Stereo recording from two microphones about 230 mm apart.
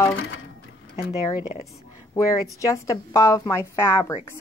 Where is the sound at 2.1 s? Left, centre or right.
Centre.